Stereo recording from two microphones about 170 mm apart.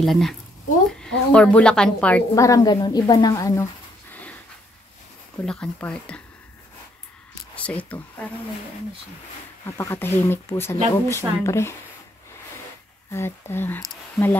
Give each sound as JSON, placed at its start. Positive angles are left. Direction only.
{"t": 0.0, "sound": "a woman's voice", "side_deg": 0}
{"t": 4.1, "sound": "dog", "side_deg": 10}
{"t": 5.4, "sound": "a woman's voice", "side_deg": 5}
{"t": 7.5, "sound": "speech", "side_deg": 10}
{"t": 9.7, "sound": "a woman's voice", "side_deg": 15}
{"t": 13.1, "sound": "a woman's voice", "side_deg": 15}